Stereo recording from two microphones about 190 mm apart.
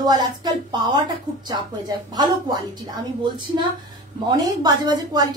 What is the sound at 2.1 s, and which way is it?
A woman's voice, 20° right (ahead or behind).